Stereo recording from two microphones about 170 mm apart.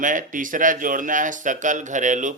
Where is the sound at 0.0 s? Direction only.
50° right (ahead or behind).